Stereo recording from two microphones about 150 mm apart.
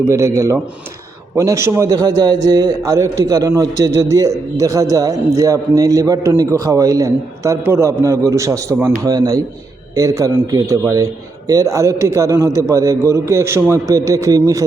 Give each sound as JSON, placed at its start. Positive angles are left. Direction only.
{"t": 0.1, "sound": "a man's voice", "side_deg": -20}